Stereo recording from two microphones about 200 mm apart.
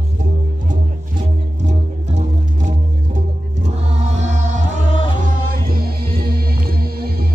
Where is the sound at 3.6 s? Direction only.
35° right (ahead or behind).